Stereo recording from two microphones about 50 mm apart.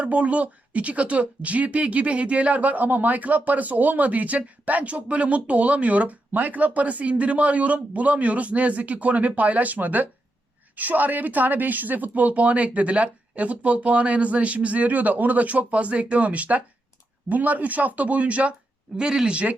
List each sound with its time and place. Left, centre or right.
0.0 s speech: right
18.9 s speech: centre